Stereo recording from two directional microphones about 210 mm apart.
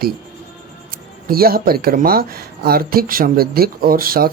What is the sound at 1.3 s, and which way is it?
Speech, 45° right (ahead or behind).